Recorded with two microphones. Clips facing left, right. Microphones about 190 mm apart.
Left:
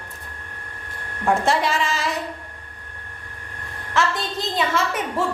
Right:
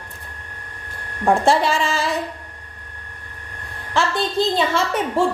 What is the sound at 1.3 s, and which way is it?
Speech, 30° right (ahead or behind).